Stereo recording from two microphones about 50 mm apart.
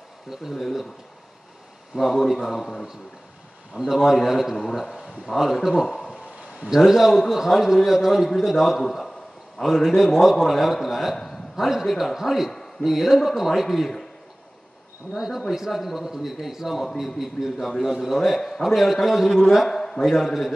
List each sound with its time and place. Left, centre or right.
0.3 s a man's voice: centre
2.0 s a man's voice: centre
3.7 s a man's voice: centre
15.1 s a man's voice: centre